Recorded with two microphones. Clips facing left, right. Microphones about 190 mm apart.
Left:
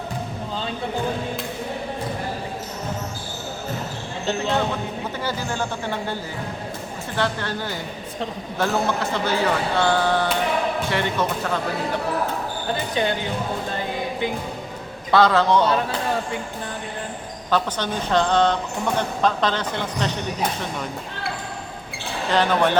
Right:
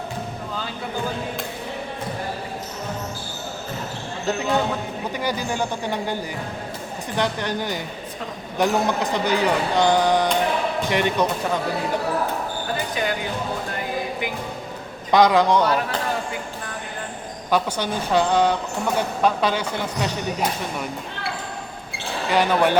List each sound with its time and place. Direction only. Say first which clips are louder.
5.2 s speech: right 2 dB; 15° right (ahead or behind)
7.2 s speech: right 1 dB; 15° right (ahead or behind)
12.9 s speech: left 4 dB; 30° left (ahead or behind)
15.1 s speech: right 1 dB; 15° right (ahead or behind)
17.5 s speech: right 1 dB; 10° right (ahead or behind)
22.3 s speech: right 1 dB; 10° right (ahead or behind)